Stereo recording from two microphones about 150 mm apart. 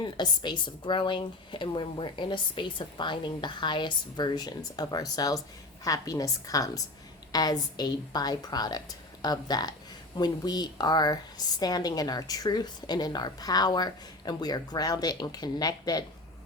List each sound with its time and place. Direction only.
0.0 s a woman's voice: 30° left (ahead or behind)